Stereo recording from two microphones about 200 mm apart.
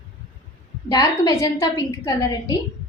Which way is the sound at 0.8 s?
20° left (ahead or behind).